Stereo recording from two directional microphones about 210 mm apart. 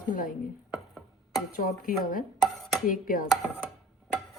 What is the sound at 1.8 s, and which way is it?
Speech, 40° left (ahead or behind).